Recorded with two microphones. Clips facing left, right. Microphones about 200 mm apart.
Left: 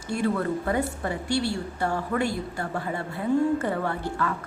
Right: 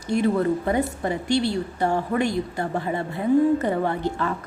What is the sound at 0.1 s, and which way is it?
A woman's voice, 20° right (ahead or behind).